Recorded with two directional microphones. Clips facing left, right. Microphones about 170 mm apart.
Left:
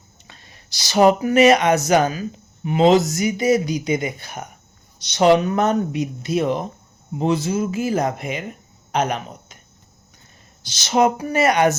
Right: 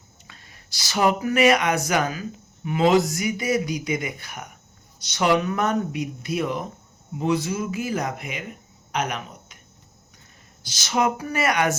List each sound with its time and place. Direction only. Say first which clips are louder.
0.3 s speech: left 3 dB; 25° left (ahead or behind)
11.2 s speech: left 6 dB; 25° left (ahead or behind)